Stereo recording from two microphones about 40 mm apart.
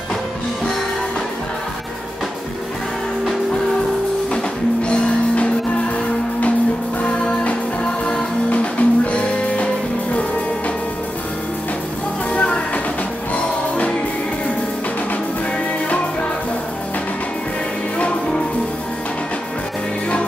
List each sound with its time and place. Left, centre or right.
4.8 s music: left
7.4 s music: left
12.3 s music: left
17.9 s music: left